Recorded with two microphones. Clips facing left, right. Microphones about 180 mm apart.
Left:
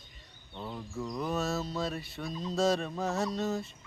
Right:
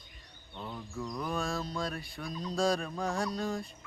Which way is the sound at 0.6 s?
10° left (ahead or behind).